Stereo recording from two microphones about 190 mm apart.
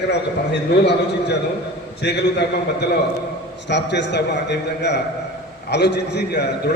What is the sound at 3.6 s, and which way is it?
A man's voice, 65° left (ahead or behind).